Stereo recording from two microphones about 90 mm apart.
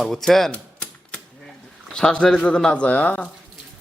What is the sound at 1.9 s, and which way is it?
Speech, 10° left (ahead or behind).